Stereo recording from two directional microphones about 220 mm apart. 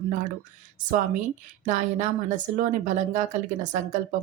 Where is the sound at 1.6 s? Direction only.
35° right (ahead or behind).